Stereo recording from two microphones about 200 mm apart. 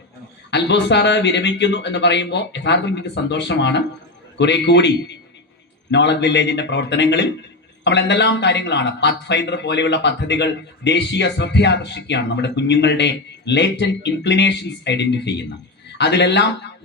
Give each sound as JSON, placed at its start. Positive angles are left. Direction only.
{"t": 0.5, "sound": "a man's voice", "side_deg": 60}